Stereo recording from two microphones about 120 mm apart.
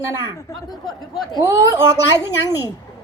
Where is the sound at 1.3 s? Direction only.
25° right (ahead or behind).